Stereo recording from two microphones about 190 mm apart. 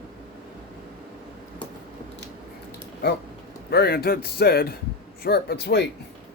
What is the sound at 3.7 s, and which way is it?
Speech, 55° left (ahead or behind).